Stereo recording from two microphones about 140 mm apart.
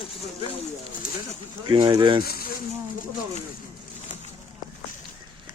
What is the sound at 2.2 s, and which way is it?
Speech, 90° left.